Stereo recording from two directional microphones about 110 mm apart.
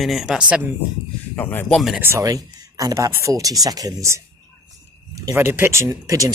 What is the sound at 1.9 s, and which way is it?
Speech, 20° right (ahead or behind).